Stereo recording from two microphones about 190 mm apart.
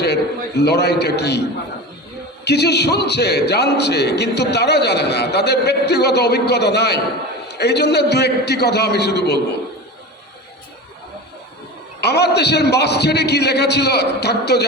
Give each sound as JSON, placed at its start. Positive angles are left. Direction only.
{"t": 0.0, "sound": "a man's voice", "side_deg": 60}
{"t": 11.9, "sound": "a man's voice", "side_deg": 60}